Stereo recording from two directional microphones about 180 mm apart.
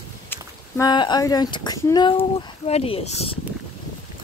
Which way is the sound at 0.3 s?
20° left (ahead or behind).